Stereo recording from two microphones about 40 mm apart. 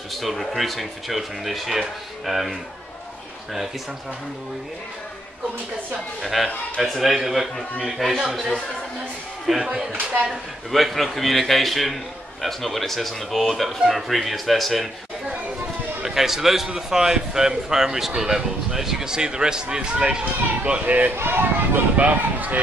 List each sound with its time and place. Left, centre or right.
0.1 s a man's voice: centre
6.2 s a man's voice: centre
10.7 s a man's voice: centre
16.0 s a man's voice: centre
20.6 s speech: right
21.1 s speech: right
21.9 s speech: right